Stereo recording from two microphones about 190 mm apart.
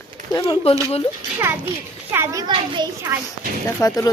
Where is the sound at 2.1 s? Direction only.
15° right (ahead or behind).